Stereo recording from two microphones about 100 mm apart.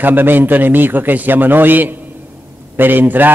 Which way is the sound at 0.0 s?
20° right (ahead or behind).